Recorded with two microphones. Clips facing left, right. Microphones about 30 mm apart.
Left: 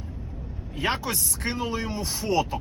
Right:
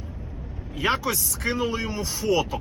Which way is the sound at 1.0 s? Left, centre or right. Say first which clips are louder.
Right 3 dB; right.